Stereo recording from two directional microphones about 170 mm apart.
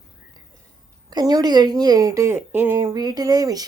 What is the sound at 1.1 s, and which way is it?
A woman's voice, 25° right (ahead or behind).